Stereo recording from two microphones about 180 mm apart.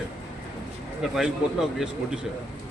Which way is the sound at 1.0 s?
5° right (ahead or behind).